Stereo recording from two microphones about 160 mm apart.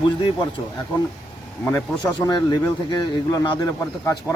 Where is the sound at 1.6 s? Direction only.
10° left (ahead or behind).